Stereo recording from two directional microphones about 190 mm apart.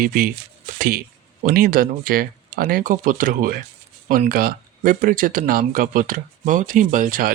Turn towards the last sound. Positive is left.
turn(degrees=-45)  # may be behind; listen again after turning